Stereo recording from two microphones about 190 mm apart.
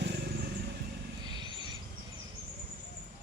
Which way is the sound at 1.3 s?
25° right (ahead or behind).